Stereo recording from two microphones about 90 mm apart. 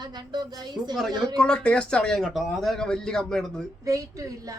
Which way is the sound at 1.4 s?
10° left (ahead or behind).